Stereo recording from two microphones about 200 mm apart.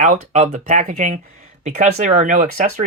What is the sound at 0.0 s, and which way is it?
Speech, 35° right (ahead or behind).